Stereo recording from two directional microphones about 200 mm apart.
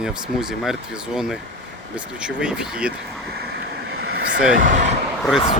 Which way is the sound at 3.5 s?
55° right (ahead or behind).